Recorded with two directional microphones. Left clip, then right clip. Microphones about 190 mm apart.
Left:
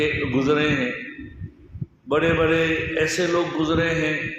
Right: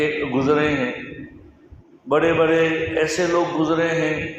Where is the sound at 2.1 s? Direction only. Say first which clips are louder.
Right 3 dB; 15° left (ahead or behind).